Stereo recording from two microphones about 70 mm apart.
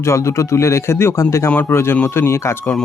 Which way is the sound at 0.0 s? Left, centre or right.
Left.